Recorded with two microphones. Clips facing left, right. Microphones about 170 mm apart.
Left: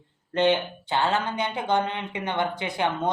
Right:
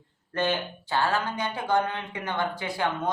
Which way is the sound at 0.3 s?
20° left (ahead or behind).